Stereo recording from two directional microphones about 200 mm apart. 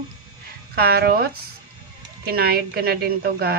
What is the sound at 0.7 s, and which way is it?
Speech, 50° right (ahead or behind).